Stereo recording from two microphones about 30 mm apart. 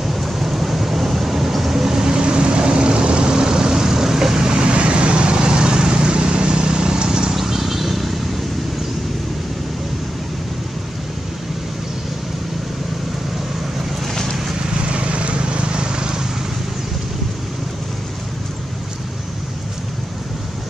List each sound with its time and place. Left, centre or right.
0.0 s vehicle: centre
1.9 s vehicle: right
4.6 s vehicle: right
7.3 s vehicle: centre
14.7 s vehicle: right